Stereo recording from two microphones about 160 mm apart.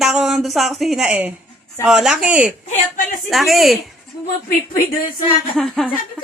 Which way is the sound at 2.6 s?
50° left (ahead or behind).